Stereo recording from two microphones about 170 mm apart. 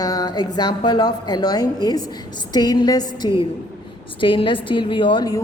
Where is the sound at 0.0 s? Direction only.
20° left (ahead or behind).